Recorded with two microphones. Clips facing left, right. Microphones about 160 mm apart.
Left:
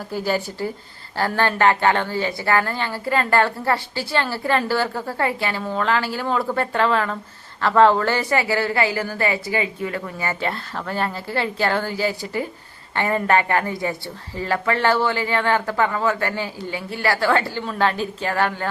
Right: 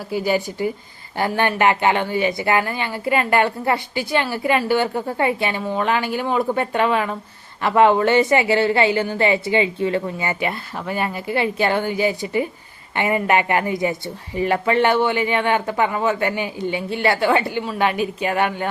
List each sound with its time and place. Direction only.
0.1 s a woman's voice: 15° right (ahead or behind)